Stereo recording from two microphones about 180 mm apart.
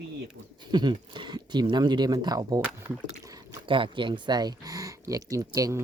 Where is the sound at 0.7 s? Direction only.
25° right (ahead or behind).